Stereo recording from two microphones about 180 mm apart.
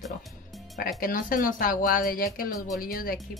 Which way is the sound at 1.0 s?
50° left (ahead or behind).